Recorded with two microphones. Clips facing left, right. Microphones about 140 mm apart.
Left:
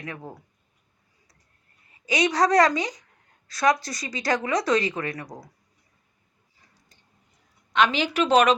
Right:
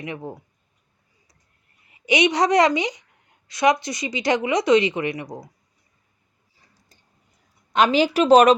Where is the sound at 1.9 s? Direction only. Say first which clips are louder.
Right 5 dB; 20° right (ahead or behind).